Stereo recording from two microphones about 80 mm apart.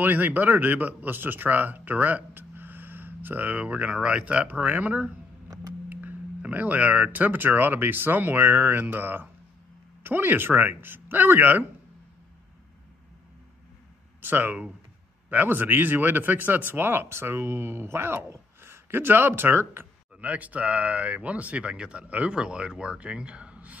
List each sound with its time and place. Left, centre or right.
0.0 s speech: right
14.2 s speech: right